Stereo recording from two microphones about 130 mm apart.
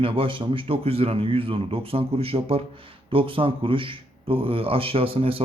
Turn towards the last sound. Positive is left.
turn(degrees=-45)  # may be behind; listen again after turning